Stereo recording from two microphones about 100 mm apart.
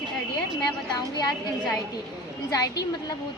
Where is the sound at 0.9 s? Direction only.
40° left (ahead or behind).